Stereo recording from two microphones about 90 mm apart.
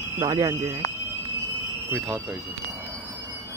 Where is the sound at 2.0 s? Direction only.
5° right (ahead or behind).